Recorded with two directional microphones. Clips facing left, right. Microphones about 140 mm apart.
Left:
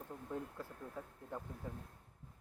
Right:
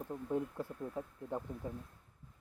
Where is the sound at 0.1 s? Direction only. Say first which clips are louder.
Right 8 dB; 20° right (ahead or behind).